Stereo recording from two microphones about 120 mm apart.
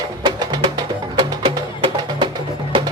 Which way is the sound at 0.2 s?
35° right (ahead or behind).